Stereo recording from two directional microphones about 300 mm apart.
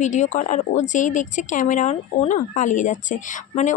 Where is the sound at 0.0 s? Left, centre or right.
Left.